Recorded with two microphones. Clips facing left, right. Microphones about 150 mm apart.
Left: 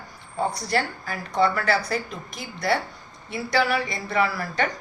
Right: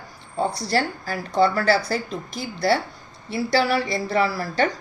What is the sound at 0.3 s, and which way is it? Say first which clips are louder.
A woman's voice: right 2 dB; 30° right (ahead or behind).